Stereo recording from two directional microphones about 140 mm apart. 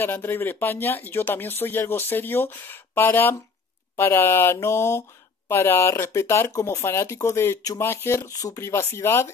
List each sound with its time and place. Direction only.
0.0 s speech: 15° left (ahead or behind)